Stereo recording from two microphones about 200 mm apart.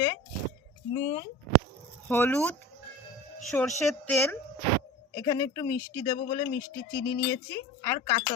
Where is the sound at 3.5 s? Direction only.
10° left (ahead or behind).